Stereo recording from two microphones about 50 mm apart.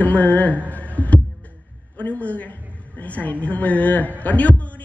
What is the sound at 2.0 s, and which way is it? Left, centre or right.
A woman's voice, left.